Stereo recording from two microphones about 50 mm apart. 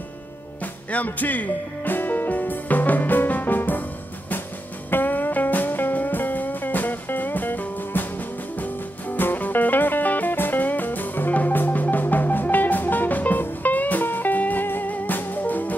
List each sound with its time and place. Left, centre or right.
0.9 s music: left
4.9 s music: left